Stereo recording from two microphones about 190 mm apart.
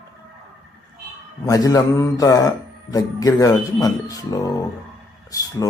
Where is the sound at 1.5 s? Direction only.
20° left (ahead or behind).